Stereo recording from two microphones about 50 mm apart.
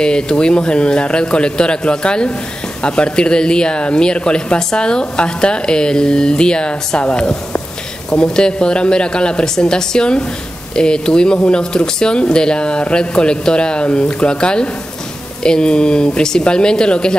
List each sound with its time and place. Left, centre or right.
0.0 s speech: centre